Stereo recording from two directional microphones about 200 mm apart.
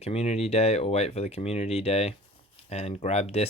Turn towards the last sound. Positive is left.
turn(degrees=30)  # may be behind; listen again after turning